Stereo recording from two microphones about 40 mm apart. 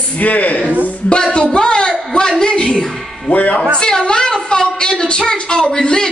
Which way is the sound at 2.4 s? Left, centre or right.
Left.